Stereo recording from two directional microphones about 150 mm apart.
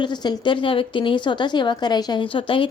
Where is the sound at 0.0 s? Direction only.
30° left (ahead or behind).